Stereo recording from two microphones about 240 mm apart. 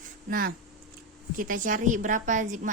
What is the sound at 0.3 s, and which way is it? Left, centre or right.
A woman's voice, right.